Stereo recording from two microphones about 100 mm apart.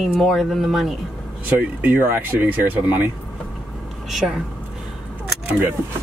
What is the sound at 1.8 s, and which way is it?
Speech, 20° right (ahead or behind).